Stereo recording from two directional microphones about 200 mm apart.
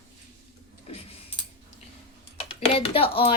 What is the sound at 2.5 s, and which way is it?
Speech, 30° left (ahead or behind).